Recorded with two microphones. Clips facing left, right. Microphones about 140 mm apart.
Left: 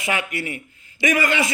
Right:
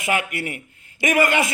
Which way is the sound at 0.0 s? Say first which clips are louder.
Right 2 dB; 50° right (ahead or behind).